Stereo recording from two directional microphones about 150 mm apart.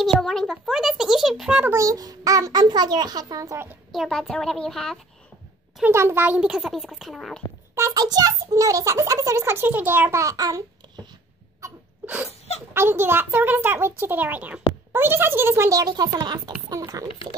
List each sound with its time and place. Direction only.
0.0 s a child's voice: centre (ahead or behind)
1.7 s a child's voice: 20° right (ahead or behind)
3.9 s a child's voice: centre (ahead or behind)
5.9 s a child's voice: 15° right (ahead or behind); by 7.4 s centre (ahead or behind)
7.7 s a child's voice: 20° right (ahead or behind)
11.6 s sneeze: 15° right (ahead or behind)
12.3 s speech: 45° left (ahead or behind)
12.7 s a child's voice: 15° right (ahead or behind)